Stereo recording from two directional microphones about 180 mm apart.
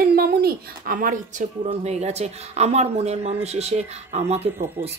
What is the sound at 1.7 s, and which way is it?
Speech, 35° right (ahead or behind).